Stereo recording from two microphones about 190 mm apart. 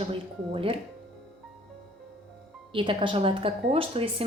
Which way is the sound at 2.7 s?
25° right (ahead or behind).